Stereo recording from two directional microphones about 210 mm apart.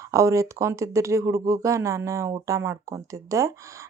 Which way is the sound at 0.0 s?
15° right (ahead or behind).